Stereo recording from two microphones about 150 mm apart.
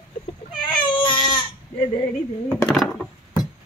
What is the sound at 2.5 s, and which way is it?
Speech, 10° left (ahead or behind).